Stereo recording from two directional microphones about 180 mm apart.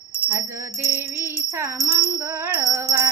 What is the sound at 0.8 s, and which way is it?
Music, 15° right (ahead or behind).